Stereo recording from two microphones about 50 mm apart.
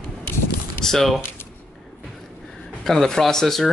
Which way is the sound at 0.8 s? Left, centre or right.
Centre.